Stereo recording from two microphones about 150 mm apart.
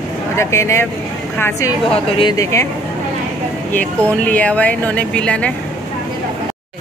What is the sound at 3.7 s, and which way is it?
Speech, 10° left (ahead or behind).